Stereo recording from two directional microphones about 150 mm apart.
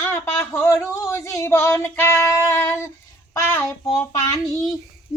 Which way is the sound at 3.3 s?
20° left (ahead or behind).